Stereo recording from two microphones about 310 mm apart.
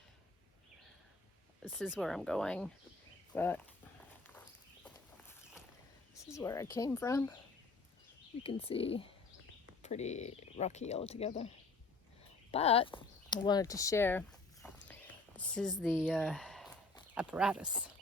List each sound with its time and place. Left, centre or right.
1.6 s speech: centre
4.4 s walk: centre
6.3 s speech: centre
8.4 s speech: centre